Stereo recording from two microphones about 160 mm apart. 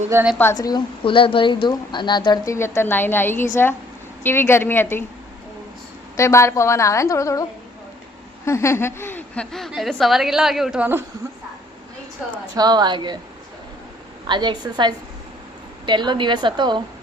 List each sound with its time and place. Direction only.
0.1 s a woman's voice: 15° right (ahead or behind)
0.5 s a woman's voice: 25° left (ahead or behind)
6.1 s a woman's voice: 20° left (ahead or behind)
8.4 s a woman's voice: 15° left (ahead or behind); by 11.0 s 10° right (ahead or behind)
12.2 s a woman's voice: 5° right (ahead or behind)
12.5 s a woman's voice: 25° right (ahead or behind)
14.3 s a woman's voice: 30° right (ahead or behind)